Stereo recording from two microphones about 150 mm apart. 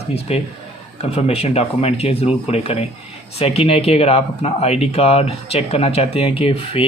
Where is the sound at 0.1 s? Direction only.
40° left (ahead or behind).